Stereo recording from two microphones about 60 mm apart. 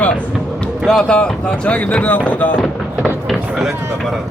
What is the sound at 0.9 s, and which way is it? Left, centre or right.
Speech, centre.